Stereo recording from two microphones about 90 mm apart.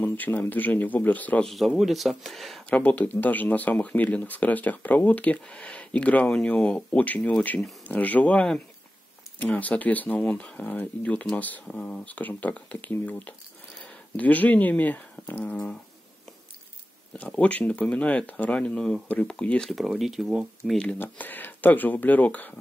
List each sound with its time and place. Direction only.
0.0 s speech: 20° left (ahead or behind)
1.4 s speech: centre (ahead or behind)
2.7 s speech: 15° left (ahead or behind)
14.1 s speech: 20° left (ahead or behind)
17.1 s speech: 15° left (ahead or behind)
19.7 s speech: centre (ahead or behind)
20.7 s speech: 10° left (ahead or behind)